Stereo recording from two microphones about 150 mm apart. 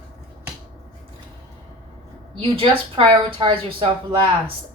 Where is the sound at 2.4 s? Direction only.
35° right (ahead or behind).